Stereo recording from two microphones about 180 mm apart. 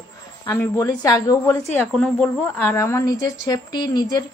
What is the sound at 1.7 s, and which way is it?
Speech, 5° left (ahead or behind).